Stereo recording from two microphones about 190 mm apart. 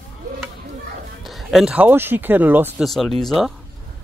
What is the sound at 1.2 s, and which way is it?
Speech, centre (ahead or behind).